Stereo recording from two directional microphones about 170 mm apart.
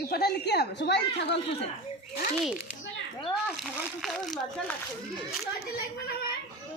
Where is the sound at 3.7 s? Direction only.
Centre (ahead or behind).